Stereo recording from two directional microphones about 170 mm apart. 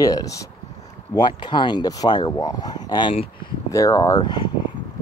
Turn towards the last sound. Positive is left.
turn(degrees=25)  # may be behind; listen again after turning